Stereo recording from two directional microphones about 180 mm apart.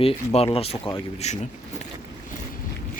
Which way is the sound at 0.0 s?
30° left (ahead or behind).